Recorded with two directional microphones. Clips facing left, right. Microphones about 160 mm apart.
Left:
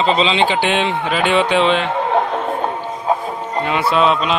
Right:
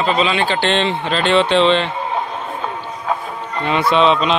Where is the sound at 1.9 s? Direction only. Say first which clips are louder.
Left 5 dB; 70° left (ahead or behind); by 2.7 s 50° left (ahead or behind).